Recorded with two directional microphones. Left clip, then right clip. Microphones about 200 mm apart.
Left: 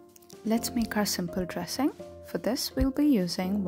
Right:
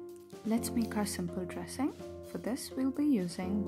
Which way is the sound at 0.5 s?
20° left (ahead or behind).